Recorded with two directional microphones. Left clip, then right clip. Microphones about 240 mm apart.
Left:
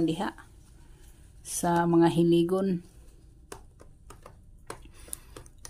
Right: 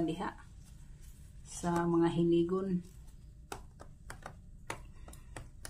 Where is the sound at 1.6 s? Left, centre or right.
Left.